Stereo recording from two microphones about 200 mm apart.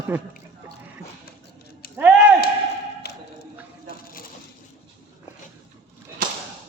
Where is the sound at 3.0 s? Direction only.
55° left (ahead or behind).